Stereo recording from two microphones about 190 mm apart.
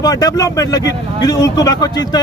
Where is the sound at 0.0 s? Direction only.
20° left (ahead or behind).